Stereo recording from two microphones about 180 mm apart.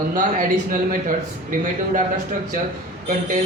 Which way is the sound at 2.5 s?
50° right (ahead or behind).